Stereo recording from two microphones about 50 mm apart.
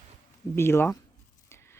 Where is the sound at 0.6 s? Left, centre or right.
Left.